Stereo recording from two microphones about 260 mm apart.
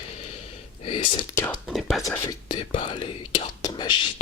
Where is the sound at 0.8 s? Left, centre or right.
Left.